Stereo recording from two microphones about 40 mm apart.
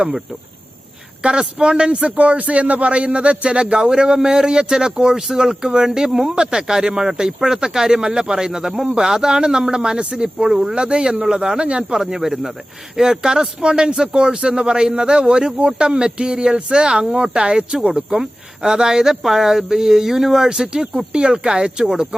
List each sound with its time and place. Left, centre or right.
1.2 s a man's voice: right
10.5 s speech: centre
10.8 s a man's voice: right
11.9 s a man's voice: centre
18.1 s a man's voice: centre